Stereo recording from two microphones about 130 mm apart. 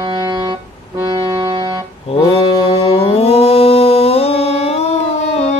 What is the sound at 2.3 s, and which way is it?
Music, 50° left (ahead or behind).